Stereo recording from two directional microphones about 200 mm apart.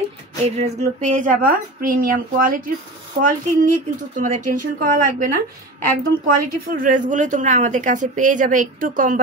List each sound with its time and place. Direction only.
0.4 s a woman's voice: 35° right (ahead or behind)